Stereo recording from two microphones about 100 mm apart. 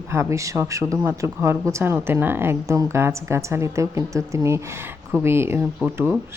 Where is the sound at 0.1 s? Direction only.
30° right (ahead or behind).